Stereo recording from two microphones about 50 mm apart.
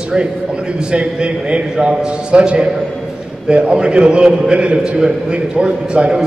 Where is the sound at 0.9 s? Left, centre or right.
Right.